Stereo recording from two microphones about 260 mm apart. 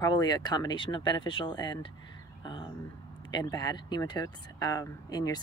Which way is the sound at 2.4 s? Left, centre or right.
Centre.